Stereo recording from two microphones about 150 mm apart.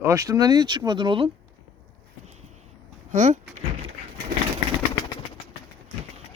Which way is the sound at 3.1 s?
55° right (ahead or behind).